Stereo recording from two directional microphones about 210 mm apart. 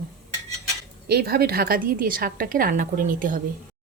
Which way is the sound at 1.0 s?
45° right (ahead or behind).